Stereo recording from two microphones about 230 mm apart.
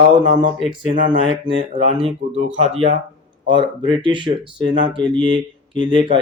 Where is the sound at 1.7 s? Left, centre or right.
Right.